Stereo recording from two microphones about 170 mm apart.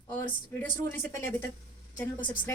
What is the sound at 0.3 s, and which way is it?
Speech, 10° left (ahead or behind).